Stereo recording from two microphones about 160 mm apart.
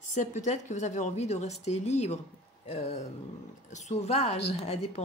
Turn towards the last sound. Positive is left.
turn(degrees=40)  # may be behind; listen again after turning